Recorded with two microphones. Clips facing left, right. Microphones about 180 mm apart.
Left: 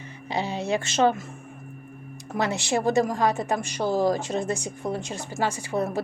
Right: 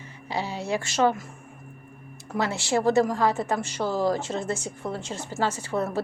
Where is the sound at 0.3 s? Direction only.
20° left (ahead or behind).